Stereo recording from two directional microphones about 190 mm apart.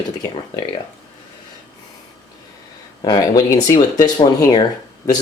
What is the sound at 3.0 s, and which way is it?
Speech, 20° left (ahead or behind).